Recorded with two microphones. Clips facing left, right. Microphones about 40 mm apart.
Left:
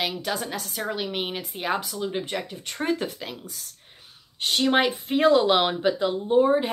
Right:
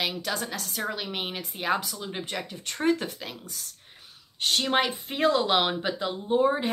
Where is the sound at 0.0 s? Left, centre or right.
Centre.